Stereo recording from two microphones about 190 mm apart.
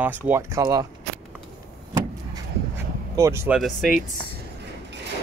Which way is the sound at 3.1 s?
15° right (ahead or behind).